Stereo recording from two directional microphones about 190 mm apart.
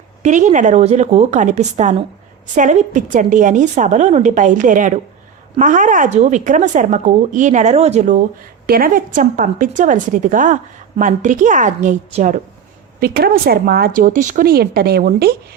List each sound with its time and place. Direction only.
0.2 s a woman's voice: 40° right (ahead or behind)
8.6 s a woman's voice: 50° right (ahead or behind)
13.0 s a woman's voice: 50° right (ahead or behind)